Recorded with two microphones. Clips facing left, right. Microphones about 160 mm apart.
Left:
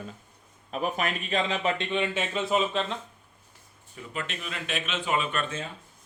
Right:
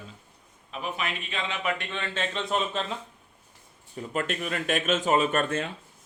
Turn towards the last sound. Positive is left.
turn(degrees=-40)  # may be behind; listen again after turning